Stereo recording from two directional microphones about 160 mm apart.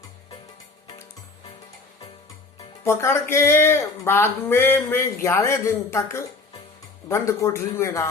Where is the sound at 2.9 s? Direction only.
15° left (ahead or behind).